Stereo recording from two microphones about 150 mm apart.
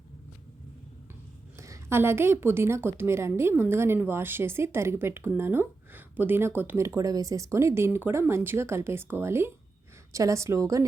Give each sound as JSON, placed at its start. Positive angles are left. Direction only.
{"t": 1.5, "sound": "a woman's voice", "side_deg": -20}